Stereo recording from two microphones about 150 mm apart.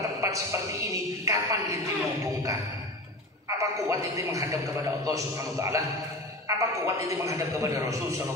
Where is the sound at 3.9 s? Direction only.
20° right (ahead or behind).